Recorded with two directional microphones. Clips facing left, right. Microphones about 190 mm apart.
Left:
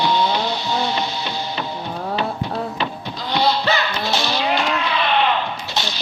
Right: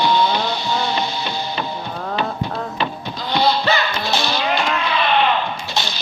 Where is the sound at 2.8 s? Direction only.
50° right (ahead or behind).